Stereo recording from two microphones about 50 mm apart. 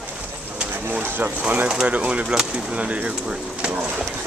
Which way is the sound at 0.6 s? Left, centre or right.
Right.